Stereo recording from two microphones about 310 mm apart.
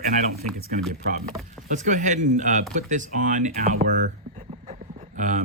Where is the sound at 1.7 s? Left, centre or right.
Right.